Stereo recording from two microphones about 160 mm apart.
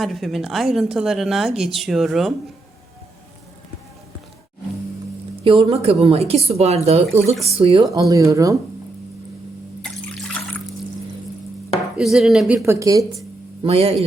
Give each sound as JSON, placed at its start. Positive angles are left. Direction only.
{"t": 0.0, "sound": "a woman's voice", "side_deg": 0}
{"t": 5.4, "sound": "speech", "side_deg": -35}
{"t": 7.9, "sound": "speech", "side_deg": -20}
{"t": 11.9, "sound": "a woman's voice", "side_deg": 0}
{"t": 12.6, "sound": "speech", "side_deg": -20}
{"t": 13.6, "sound": "speech", "side_deg": -35}